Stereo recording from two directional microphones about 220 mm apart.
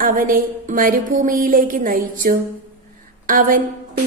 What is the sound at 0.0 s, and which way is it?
A woman's voice, 40° right (ahead or behind).